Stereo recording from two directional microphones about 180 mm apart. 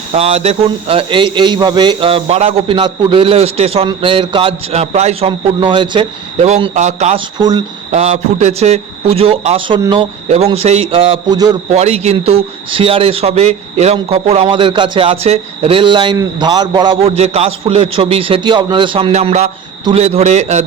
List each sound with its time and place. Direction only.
0.1 s speech: 35° right (ahead or behind)
7.3 s speech: 25° right (ahead or behind)
7.9 s speech: 40° right (ahead or behind); by 11.5 s 20° right (ahead or behind)
11.7 s speech: 35° right (ahead or behind)